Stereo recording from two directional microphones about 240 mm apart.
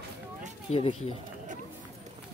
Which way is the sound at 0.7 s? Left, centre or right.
Left.